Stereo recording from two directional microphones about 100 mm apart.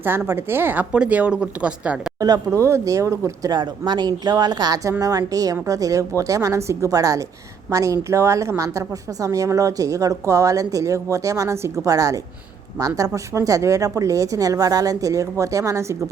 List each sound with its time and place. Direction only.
0.3 s speech: 20° right (ahead or behind)
2.2 s a woman's voice: 35° right (ahead or behind)
3.5 s a woman's voice: 45° right (ahead or behind); by 16.0 s 30° right (ahead or behind)